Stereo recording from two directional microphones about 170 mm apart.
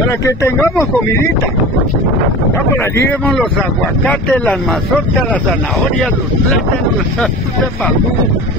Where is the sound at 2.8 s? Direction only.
15° left (ahead or behind).